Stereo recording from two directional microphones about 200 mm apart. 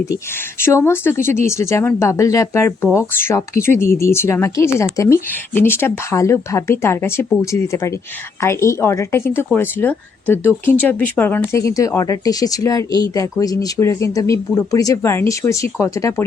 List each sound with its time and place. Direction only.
0.6 s speech: 15° left (ahead or behind)